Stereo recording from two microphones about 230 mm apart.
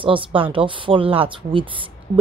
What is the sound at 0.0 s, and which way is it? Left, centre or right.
A woman's voice, right.